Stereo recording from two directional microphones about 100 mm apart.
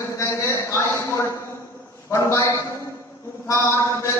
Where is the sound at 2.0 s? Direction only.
30° left (ahead or behind).